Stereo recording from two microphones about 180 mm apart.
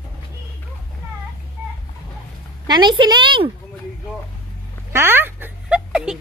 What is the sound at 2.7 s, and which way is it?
Speech, 25° right (ahead or behind).